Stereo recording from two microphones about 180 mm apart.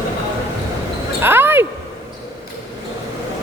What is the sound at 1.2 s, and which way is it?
Basketball bounce, 10° right (ahead or behind).